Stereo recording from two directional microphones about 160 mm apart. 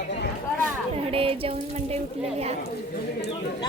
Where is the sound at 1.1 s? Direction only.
35° right (ahead or behind).